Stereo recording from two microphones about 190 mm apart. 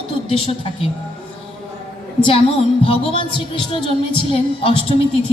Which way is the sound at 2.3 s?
30° left (ahead or behind).